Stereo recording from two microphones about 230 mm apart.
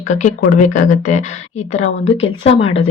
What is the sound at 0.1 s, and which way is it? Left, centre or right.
Speech, left.